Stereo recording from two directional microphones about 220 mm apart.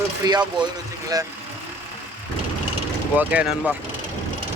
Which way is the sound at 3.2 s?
5° right (ahead or behind).